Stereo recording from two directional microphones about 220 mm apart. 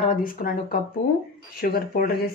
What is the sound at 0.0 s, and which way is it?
A woman's voice, 40° left (ahead or behind).